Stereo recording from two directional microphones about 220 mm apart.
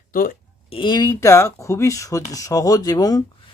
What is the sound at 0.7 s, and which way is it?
Speech, 20° left (ahead or behind).